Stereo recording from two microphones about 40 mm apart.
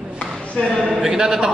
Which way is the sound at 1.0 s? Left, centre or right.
Centre.